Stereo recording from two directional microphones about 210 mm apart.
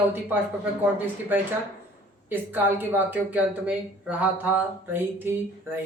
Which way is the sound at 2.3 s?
10° right (ahead or behind).